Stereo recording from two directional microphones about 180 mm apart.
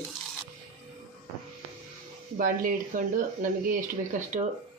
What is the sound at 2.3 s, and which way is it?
Speech, 50° right (ahead or behind).